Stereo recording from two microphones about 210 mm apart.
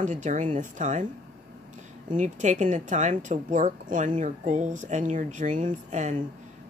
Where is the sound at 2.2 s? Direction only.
35° right (ahead or behind).